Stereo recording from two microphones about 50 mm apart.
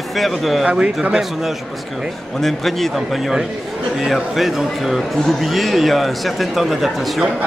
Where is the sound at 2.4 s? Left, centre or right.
Centre.